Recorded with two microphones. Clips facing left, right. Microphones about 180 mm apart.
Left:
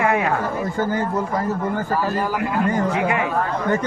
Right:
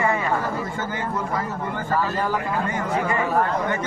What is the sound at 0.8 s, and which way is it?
Speech, 40° left (ahead or behind).